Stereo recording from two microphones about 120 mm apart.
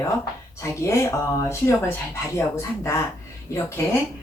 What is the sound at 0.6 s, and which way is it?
Speech, 25° left (ahead or behind).